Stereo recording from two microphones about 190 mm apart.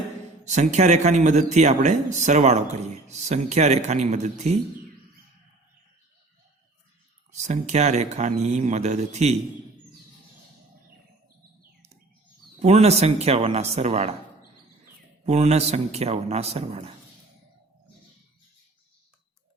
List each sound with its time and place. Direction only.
0.4 s a man's voice: 40° right (ahead or behind)
7.4 s a man's voice: 35° right (ahead or behind)
12.5 s a man's voice: 35° right (ahead or behind)
15.2 s a man's voice: 35° right (ahead or behind)